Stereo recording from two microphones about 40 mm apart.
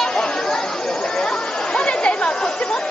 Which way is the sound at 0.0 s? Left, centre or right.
Centre.